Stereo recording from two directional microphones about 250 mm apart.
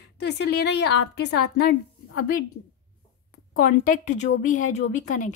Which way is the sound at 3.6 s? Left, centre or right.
Left.